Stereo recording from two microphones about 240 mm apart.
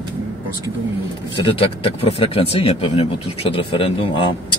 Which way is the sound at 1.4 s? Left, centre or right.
Left.